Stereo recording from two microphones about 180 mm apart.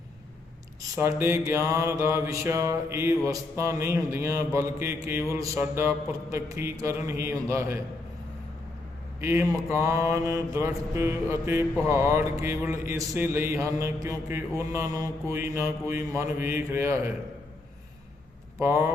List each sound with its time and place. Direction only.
0.9 s mantra: 15° right (ahead or behind)
9.2 s mantra: 15° right (ahead or behind)
18.6 s mantra: 15° right (ahead or behind)